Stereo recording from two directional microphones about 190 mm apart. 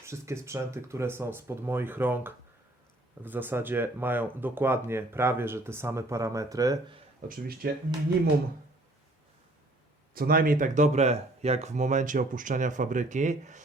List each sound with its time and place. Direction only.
0.0 s speech: 15° right (ahead or behind)
7.3 s speech: 50° right (ahead or behind)
10.2 s speech: 50° right (ahead or behind)